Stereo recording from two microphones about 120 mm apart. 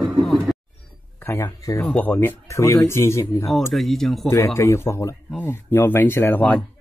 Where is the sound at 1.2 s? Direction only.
20° left (ahead or behind).